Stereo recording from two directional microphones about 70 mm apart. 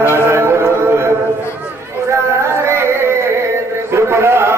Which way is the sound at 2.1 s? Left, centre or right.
Right.